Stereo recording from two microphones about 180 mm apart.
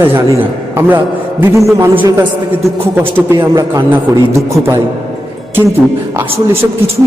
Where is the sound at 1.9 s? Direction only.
25° right (ahead or behind).